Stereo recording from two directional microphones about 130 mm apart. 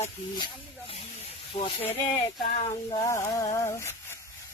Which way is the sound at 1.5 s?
25° left (ahead or behind).